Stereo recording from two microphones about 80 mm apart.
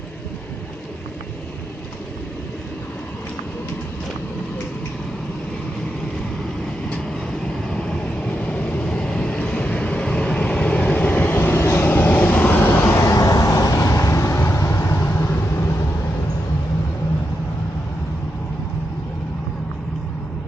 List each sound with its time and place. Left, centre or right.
6.9 s vehicle: centre
13.0 s vehicle: left